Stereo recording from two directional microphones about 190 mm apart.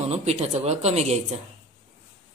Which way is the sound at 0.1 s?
35° right (ahead or behind).